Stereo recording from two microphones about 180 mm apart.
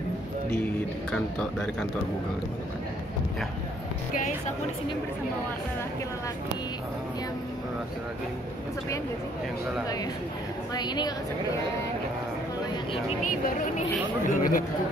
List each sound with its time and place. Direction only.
1.1 s speech: 5° left (ahead or behind)
10.7 s a woman's voice: 25° left (ahead or behind)
13.2 s speech: 50° left (ahead or behind)